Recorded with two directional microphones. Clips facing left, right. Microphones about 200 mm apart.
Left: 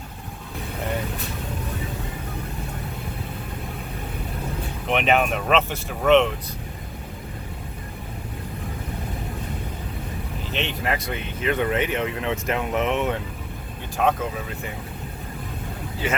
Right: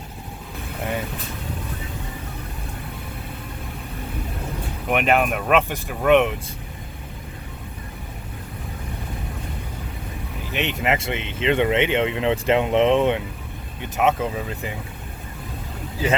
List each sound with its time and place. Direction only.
4.9 s speech: 5° right (ahead or behind)
10.5 s speech: 20° right (ahead or behind)